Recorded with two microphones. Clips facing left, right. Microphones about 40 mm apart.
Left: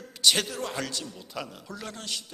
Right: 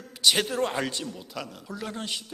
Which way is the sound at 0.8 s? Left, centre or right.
Right.